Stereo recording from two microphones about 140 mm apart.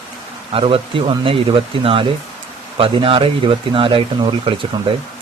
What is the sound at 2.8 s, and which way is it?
Speech, 40° right (ahead or behind).